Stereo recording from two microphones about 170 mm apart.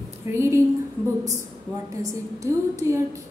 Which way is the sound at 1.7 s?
20° right (ahead or behind).